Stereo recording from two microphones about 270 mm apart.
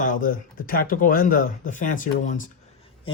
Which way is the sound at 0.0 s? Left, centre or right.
Left.